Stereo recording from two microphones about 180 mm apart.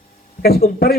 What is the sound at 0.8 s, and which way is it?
Speech, 60° left (ahead or behind).